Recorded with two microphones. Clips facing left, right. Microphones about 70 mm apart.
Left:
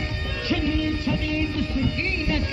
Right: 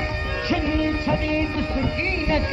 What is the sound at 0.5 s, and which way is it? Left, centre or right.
Music, right.